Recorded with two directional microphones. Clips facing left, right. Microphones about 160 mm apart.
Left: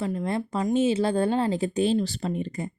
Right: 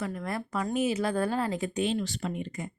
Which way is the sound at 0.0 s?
25° left (ahead or behind).